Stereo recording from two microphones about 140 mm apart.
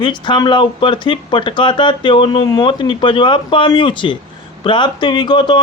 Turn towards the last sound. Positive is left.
turn(degrees=30)  # may be behind; listen again after turning